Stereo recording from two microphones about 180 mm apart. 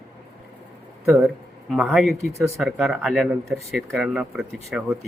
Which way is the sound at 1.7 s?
Centre (ahead or behind).